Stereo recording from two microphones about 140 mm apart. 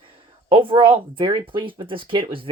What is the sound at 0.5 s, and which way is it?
Speech, 40° right (ahead or behind).